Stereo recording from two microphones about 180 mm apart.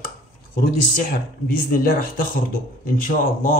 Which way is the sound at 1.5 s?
55° left (ahead or behind).